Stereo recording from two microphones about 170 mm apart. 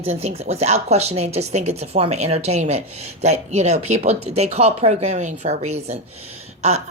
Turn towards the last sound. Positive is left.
turn(degrees=-40)  # may be behind; listen again after turning